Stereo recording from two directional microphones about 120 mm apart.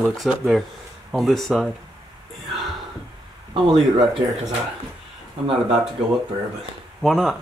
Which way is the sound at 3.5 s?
40° right (ahead or behind).